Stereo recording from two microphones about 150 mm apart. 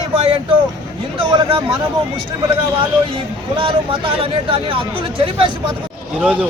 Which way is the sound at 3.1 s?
35° right (ahead or behind).